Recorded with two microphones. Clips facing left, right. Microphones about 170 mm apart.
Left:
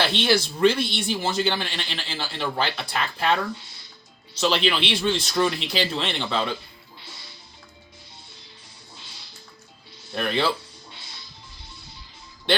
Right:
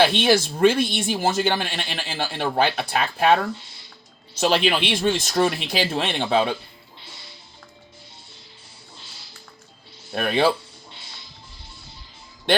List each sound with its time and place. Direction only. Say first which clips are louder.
0.2 s speech: right 3 dB; 50° right (ahead or behind)
10.1 s speech: right 4 dB; 55° right (ahead or behind)